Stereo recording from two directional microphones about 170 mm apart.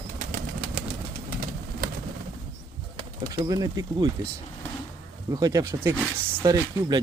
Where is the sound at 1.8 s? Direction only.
60° right (ahead or behind).